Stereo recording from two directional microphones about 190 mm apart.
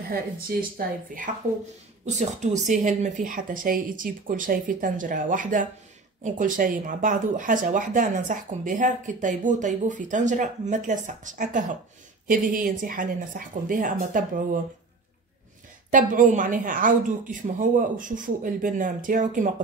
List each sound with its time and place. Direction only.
0.1 s speech: 50° right (ahead or behind)
15.9 s speech: 45° right (ahead or behind)